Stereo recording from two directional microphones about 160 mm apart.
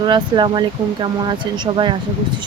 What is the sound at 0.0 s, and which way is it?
Speech, 30° right (ahead or behind).